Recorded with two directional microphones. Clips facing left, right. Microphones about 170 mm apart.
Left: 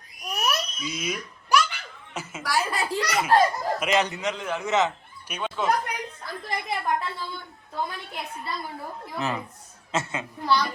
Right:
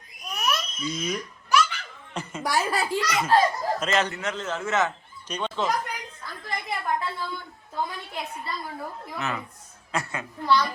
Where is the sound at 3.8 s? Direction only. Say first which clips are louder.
Left 3 dB; 15° left (ahead or behind).